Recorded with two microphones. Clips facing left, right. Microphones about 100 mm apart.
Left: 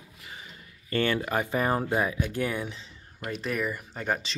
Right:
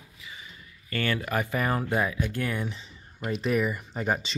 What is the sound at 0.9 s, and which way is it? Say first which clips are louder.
Speech: left 2 dB; 25° left (ahead or behind).